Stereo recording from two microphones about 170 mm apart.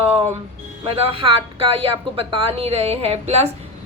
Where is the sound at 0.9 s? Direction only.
30° right (ahead or behind).